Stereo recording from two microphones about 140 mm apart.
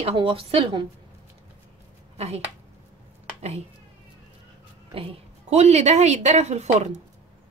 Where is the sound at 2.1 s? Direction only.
50° right (ahead or behind).